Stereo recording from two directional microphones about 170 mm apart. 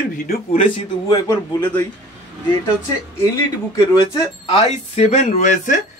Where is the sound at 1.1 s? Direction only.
20° left (ahead or behind).